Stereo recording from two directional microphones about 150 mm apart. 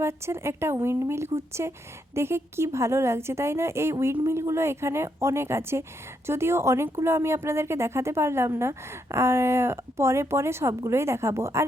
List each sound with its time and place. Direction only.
0.0 s a woman's voice: 15° right (ahead or behind)